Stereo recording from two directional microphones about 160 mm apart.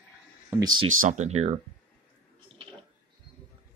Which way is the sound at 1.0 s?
45° right (ahead or behind).